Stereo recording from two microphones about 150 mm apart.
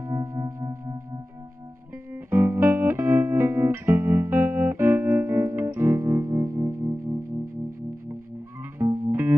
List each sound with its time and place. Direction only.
0.0 s music: 20° right (ahead or behind)
2.3 s music: 20° right (ahead or behind)
8.7 s music: 20° right (ahead or behind)